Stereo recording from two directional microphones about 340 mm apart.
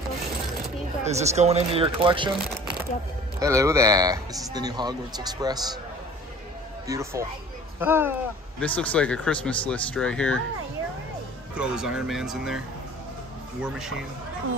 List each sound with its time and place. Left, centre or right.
1.0 s a man's voice: centre
3.3 s a man's voice: centre
6.9 s a man's voice: centre
8.5 s speech: centre
11.5 s speech: centre